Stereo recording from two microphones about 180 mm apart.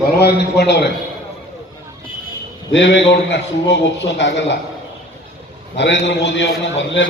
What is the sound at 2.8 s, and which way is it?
A man's voice, 75° left (ahead or behind).